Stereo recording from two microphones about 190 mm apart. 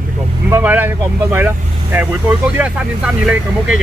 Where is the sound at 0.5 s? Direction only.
10° right (ahead or behind).